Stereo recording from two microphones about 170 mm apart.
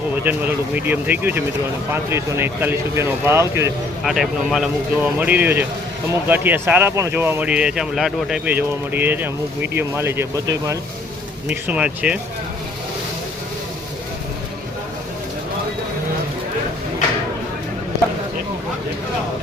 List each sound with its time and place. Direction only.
0.3 s speech: 10° right (ahead or behind)
4.0 s speech: centre (ahead or behind); by 10.8 s 20° right (ahead or behind)
11.4 s speech: 5° right (ahead or behind)